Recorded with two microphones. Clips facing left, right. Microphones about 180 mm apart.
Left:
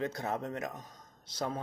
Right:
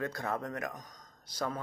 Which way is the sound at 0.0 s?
20° left (ahead or behind).